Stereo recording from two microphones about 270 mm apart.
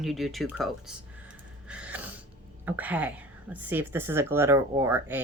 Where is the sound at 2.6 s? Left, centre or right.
Centre.